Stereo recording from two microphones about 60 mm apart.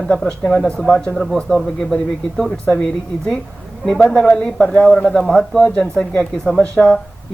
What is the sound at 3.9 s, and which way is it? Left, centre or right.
Speech, centre.